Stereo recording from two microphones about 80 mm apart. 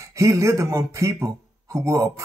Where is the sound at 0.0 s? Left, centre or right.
Right.